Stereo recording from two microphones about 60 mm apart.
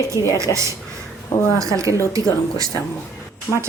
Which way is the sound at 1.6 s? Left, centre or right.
Right.